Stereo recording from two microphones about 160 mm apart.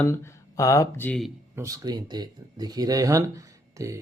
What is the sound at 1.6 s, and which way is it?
Speech, 20° right (ahead or behind).